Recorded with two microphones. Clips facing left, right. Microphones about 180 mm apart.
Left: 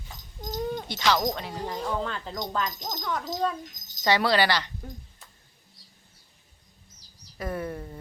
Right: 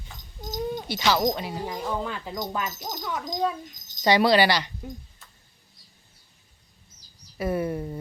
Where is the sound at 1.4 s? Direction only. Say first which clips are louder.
Right 1 dB; 10° right (ahead or behind).